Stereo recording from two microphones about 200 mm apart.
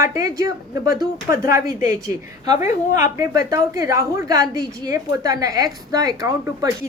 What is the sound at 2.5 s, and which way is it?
Speech, 35° left (ahead or behind).